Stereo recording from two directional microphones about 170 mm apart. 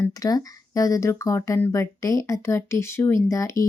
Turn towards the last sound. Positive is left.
turn(degrees=15)  # may be behind; listen again after turning